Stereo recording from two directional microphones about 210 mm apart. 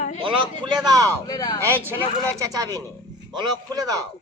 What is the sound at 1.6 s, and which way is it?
A man's voice, 10° right (ahead or behind).